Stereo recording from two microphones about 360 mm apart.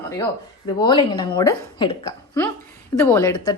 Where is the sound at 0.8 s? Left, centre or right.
Centre.